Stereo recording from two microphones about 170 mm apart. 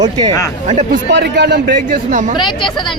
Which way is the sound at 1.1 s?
90° right.